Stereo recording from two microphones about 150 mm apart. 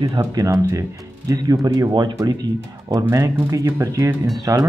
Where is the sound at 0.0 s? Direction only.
25° right (ahead or behind).